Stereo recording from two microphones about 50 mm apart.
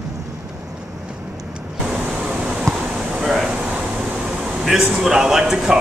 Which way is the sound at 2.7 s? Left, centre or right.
Centre.